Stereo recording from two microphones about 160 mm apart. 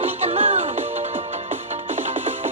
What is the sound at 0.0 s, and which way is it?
Music, 40° right (ahead or behind).